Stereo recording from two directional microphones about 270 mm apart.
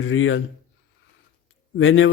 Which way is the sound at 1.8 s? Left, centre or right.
Left.